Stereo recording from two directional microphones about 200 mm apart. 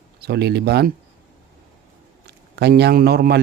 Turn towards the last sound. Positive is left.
turn(degrees=-50)  # may be behind; listen again after turning